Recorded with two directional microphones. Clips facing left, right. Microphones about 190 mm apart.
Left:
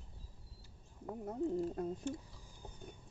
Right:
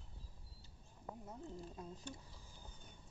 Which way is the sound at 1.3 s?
60° left (ahead or behind).